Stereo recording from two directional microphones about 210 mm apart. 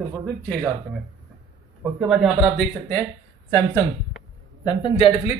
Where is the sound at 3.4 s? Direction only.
15° left (ahead or behind).